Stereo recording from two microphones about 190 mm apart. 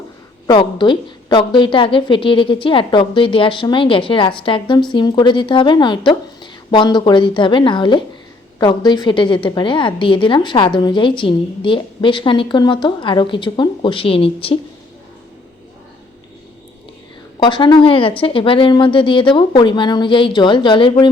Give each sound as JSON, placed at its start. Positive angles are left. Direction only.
{"t": 0.4, "sound": "a woman's voice", "side_deg": 25}
{"t": 17.4, "sound": "a woman's voice", "side_deg": 25}